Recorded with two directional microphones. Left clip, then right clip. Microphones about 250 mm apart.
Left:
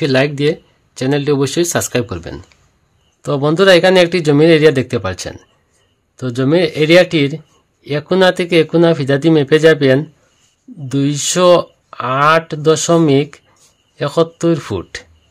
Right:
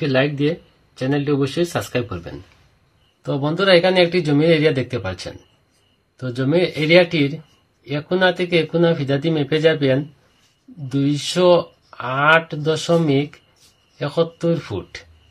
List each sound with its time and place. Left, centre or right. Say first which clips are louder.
0.0 s speech: left 5 dB; left